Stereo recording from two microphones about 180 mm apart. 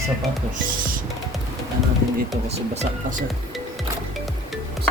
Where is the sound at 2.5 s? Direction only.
40° right (ahead or behind).